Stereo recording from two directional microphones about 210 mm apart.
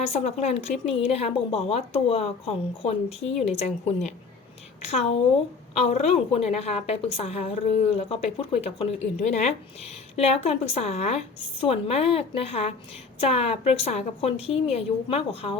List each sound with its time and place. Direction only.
0.1 s a woman's voice: 30° left (ahead or behind)